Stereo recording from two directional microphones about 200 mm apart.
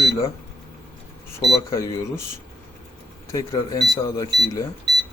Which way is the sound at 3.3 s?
15° left (ahead or behind).